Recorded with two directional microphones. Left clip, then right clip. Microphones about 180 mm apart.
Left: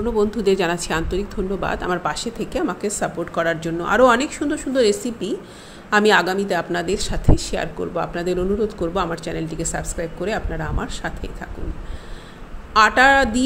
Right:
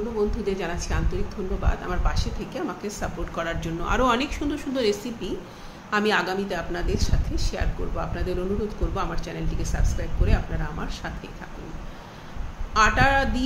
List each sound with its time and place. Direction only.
0.2 s speech: 50° left (ahead or behind)
12.7 s speech: 45° left (ahead or behind)